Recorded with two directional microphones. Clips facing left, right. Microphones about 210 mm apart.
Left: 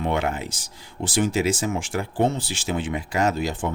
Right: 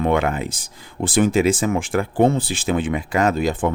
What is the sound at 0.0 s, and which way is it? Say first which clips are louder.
Speech: right 5 dB; 55° right (ahead or behind).